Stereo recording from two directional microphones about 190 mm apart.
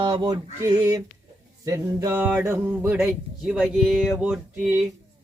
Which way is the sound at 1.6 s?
15° right (ahead or behind).